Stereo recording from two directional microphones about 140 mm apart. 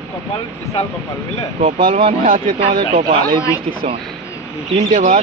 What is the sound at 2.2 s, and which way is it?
Speech, 75° right (ahead or behind).